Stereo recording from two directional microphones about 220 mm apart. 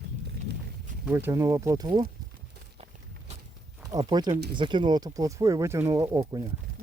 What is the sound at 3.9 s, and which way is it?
Speech, 20° right (ahead or behind).